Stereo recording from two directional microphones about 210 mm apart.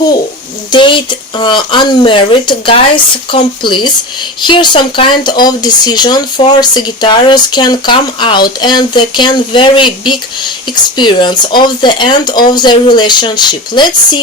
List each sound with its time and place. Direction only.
0.7 s speech: 25° left (ahead or behind)